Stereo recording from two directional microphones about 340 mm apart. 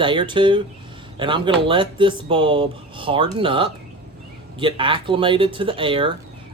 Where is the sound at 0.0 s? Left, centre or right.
Centre.